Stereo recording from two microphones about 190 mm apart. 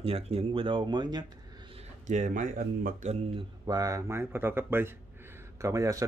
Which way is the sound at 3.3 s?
20° right (ahead or behind).